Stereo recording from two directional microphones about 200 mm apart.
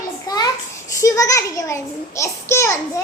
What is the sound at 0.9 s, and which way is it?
A child's voice, 15° left (ahead or behind).